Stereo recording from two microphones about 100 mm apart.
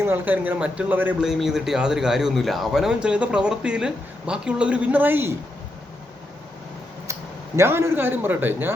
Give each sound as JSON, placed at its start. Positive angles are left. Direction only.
{"t": 0.0, "sound": "a man's voice", "side_deg": -20}
{"t": 1.2, "sound": "a man's voice", "side_deg": -5}
{"t": 7.1, "sound": "speech", "side_deg": -30}